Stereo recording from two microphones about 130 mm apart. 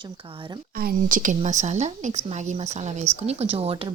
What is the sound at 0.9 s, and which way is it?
Speech, 90° right.